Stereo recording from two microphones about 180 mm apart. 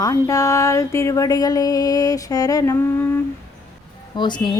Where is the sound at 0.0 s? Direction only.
20° left (ahead or behind).